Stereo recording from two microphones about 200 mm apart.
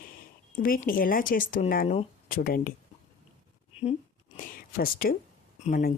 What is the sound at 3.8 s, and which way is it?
Speech, 40° left (ahead or behind).